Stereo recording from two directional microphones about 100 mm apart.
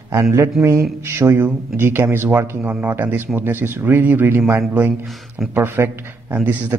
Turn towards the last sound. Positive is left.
turn(degrees=-15)  # may be behind; listen again after turning